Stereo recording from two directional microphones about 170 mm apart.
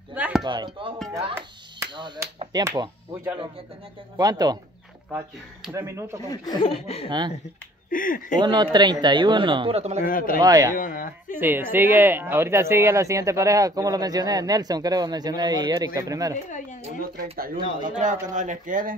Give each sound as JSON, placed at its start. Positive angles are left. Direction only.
{"t": 0.1, "sound": "chopping", "side_deg": -10}
{"t": 0.4, "sound": "speech", "side_deg": -30}
{"t": 2.0, "sound": "speech", "side_deg": -25}
{"t": 4.2, "sound": "speech", "side_deg": -20}
{"t": 5.7, "sound": "speech", "side_deg": -20}
{"t": 6.3, "sound": "speech", "side_deg": 25}
{"t": 7.1, "sound": "speech", "side_deg": -25}
{"t": 7.9, "sound": "speech", "side_deg": 55}
{"t": 8.4, "sound": "speech", "side_deg": -25}
{"t": 10.0, "sound": "speech", "side_deg": 55}
{"t": 10.4, "sound": "speech", "side_deg": -20}
{"t": 10.7, "sound": "speech", "side_deg": 55}
{"t": 11.3, "sound": "speech", "side_deg": -10}
{"t": 17.2, "sound": "speech", "side_deg": -55}